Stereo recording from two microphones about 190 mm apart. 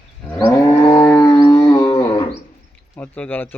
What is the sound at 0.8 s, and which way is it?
Music, 20° left (ahead or behind).